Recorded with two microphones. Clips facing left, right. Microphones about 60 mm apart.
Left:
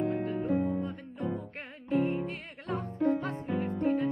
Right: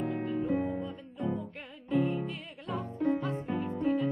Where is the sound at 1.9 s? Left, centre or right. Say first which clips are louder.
Left 1 dB; left.